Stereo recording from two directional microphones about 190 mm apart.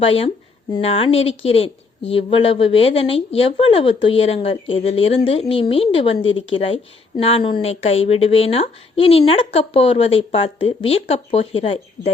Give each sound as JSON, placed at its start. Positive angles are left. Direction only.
{"t": 0.0, "sound": "a woman's voice", "side_deg": 30}